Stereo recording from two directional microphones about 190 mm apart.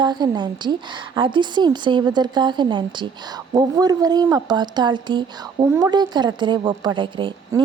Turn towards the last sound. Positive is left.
turn(degrees=-25)  # may be behind; listen again after turning